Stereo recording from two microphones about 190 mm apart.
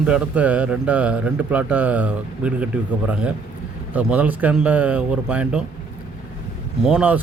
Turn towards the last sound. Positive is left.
turn(degrees=-5)  # may be behind; listen again after turning